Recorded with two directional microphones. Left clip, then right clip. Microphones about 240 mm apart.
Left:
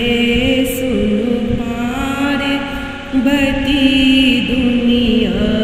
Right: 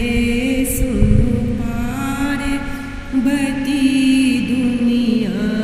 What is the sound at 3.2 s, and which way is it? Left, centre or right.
Mantra, right.